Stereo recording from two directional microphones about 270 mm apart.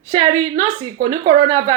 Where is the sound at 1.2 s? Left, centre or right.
Centre.